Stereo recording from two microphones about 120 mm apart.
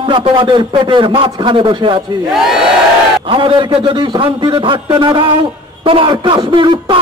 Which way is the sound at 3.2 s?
45° right (ahead or behind).